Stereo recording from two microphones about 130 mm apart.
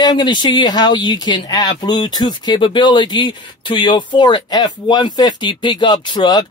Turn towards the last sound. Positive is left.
turn(degrees=35)  # may be behind; listen again after turning